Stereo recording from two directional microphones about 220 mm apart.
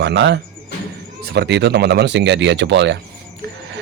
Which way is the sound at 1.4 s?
50° right (ahead or behind).